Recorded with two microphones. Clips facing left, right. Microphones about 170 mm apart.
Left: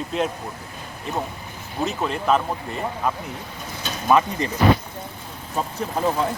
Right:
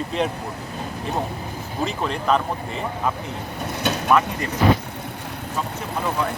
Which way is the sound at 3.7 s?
70° right (ahead or behind).